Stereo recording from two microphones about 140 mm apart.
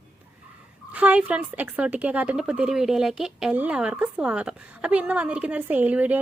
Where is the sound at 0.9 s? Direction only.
10° right (ahead or behind).